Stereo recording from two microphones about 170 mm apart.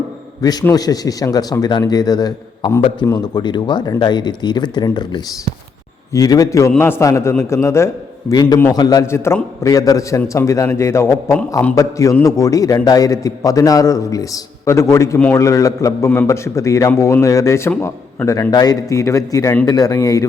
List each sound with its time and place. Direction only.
0.7 s a man's voice: 20° left (ahead or behind)